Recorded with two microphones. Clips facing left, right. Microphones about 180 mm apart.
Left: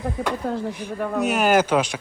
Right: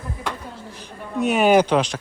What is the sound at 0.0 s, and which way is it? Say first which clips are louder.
Speech: left 6 dB; 60° left (ahead or behind).